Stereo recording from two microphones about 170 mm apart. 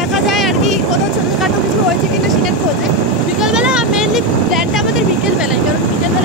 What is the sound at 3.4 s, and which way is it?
Speech, 5° right (ahead or behind).